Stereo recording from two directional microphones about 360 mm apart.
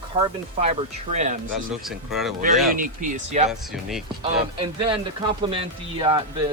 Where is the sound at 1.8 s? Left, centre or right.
Centre.